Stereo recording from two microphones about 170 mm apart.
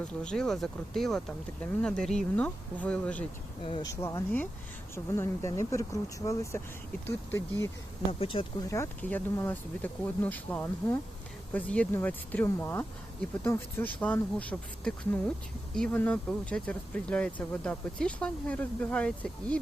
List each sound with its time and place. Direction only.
0.0 s speech: 5° left (ahead or behind)
3.6 s speech: 30° left (ahead or behind)
4.0 s speech: 10° left (ahead or behind)
8.2 s speech: 30° left (ahead or behind)
8.7 s speech: 15° left (ahead or behind)